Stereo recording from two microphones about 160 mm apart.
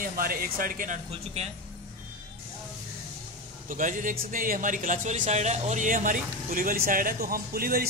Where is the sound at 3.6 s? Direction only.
55° right (ahead or behind).